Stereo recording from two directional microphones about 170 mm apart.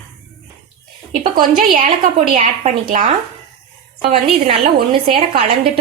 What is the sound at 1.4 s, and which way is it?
A woman's voice, 50° right (ahead or behind).